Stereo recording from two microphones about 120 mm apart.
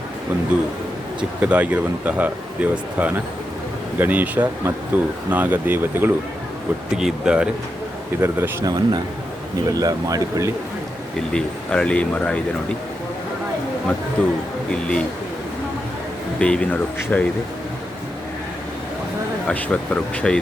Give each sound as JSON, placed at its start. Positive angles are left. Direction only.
{"t": 1.4, "sound": "speech", "side_deg": -10}
{"t": 6.9, "sound": "speech", "side_deg": -5}
{"t": 8.2, "sound": "speech", "side_deg": -25}
{"t": 11.3, "sound": "speech", "side_deg": 10}
{"t": 14.2, "sound": "speech", "side_deg": 10}
{"t": 16.4, "sound": "speech", "side_deg": 10}
{"t": 19.5, "sound": "speech", "side_deg": 10}